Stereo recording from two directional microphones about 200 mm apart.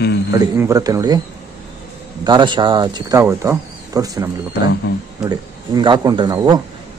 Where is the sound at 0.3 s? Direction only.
15° right (ahead or behind).